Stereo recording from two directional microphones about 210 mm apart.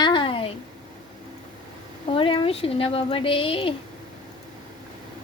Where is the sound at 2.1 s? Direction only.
25° left (ahead or behind).